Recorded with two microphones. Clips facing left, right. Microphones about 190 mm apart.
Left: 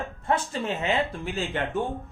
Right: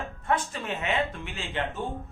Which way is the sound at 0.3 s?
30° left (ahead or behind).